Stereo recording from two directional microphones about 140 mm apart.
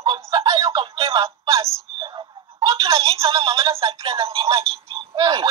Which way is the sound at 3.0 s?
45° right (ahead or behind).